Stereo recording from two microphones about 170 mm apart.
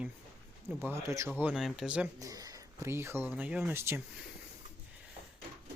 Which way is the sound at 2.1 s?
20° right (ahead or behind).